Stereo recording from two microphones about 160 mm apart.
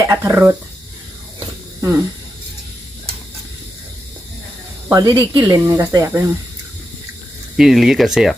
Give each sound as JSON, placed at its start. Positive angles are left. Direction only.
{"t": 0.0, "sound": "speech", "side_deg": -15}
{"t": 4.9, "sound": "speech", "side_deg": -20}
{"t": 7.5, "sound": "speech", "side_deg": 0}